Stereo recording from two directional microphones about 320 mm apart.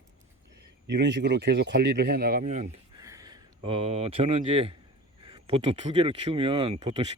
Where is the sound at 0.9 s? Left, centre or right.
Right.